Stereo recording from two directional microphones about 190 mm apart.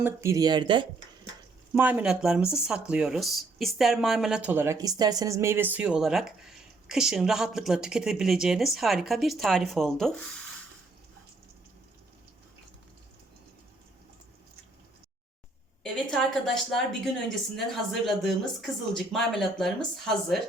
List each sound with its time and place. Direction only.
0.0 s speech: 15° right (ahead or behind)
1.7 s speech: 10° right (ahead or behind)
15.8 s a sound: centre (ahead or behind)
18.0 s speech: centre (ahead or behind)